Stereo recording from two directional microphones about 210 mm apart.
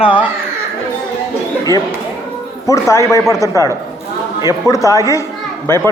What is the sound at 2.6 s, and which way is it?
Speech, 15° left (ahead or behind).